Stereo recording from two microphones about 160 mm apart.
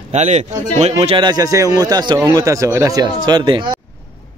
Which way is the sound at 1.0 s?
30° right (ahead or behind).